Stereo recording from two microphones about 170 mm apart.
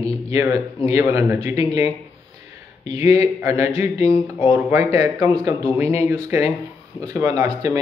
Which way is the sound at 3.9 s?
40° left (ahead or behind).